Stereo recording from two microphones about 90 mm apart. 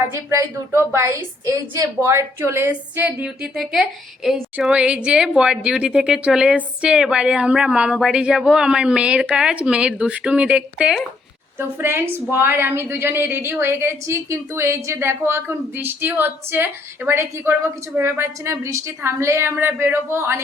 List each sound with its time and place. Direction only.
0.1 s a woman's voice: 35° right (ahead or behind); by 11.0 s 10° right (ahead or behind)
11.8 s a woman's voice: 25° right (ahead or behind)